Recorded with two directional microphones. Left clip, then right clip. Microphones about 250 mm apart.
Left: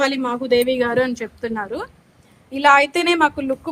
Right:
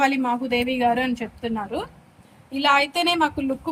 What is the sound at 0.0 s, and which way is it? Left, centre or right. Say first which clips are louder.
A woman's voice: left 1 dB; centre.